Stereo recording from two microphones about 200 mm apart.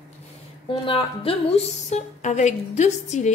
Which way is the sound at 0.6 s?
25° left (ahead or behind).